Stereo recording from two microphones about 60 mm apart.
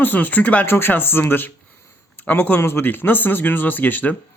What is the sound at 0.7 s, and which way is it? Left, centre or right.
Speech, left.